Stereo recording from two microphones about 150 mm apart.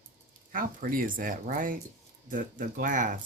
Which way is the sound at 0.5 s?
65° right (ahead or behind).